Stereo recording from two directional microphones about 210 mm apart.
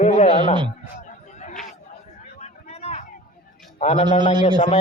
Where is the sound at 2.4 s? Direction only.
30° left (ahead or behind).